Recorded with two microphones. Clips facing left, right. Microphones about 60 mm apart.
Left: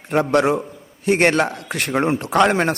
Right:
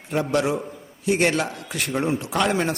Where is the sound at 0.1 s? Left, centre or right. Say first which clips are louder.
Left 5 dB; left.